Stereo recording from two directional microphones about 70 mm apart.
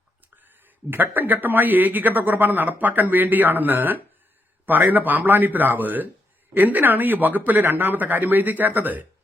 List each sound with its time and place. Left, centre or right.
0.9 s speech: right